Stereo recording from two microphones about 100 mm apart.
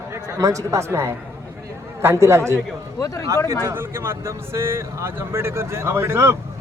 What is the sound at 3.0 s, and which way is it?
Speech, 35° left (ahead or behind).